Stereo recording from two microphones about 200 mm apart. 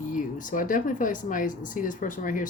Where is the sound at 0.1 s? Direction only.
40° left (ahead or behind).